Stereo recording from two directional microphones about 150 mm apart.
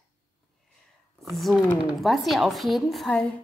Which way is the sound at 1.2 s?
Centre (ahead or behind).